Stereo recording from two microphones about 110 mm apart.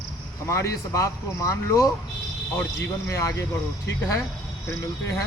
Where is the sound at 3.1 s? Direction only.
25° left (ahead or behind).